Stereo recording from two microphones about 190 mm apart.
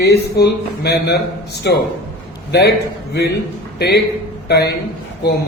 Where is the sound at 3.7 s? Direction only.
60° left (ahead or behind).